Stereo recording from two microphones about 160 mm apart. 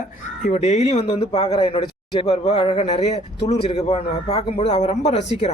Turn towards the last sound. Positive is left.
turn(degrees=45)  # may be behind; listen again after turning